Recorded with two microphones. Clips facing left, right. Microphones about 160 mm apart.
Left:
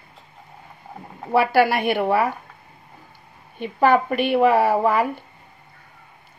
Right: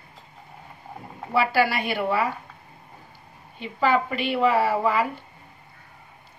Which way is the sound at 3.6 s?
55° left (ahead or behind).